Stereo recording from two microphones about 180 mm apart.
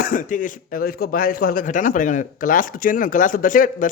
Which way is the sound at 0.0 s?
50° left (ahead or behind).